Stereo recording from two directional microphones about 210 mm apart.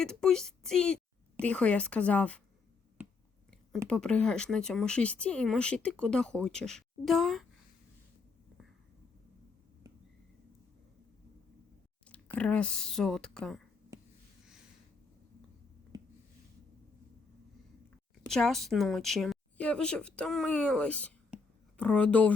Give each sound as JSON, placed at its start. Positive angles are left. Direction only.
{"t": 0.0, "sound": "a woman's voice", "side_deg": 0}
{"t": 3.8, "sound": "speech", "side_deg": 5}
{"t": 12.0, "sound": "speech", "side_deg": 5}
{"t": 15.9, "sound": "a sound", "side_deg": -20}
{"t": 18.3, "sound": "speech", "side_deg": 0}
{"t": 21.3, "sound": "a sound", "side_deg": -5}
{"t": 21.8, "sound": "speech", "side_deg": 5}